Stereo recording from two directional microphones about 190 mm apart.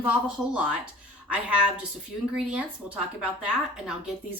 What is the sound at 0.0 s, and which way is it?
A woman's voice, 5° right (ahead or behind).